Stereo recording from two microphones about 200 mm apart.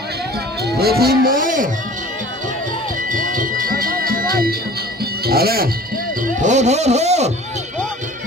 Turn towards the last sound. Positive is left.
turn(degrees=-35)  # may be behind; listen again after turning